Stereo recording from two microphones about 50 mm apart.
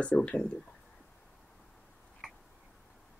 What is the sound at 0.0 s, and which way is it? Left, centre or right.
Speech, left.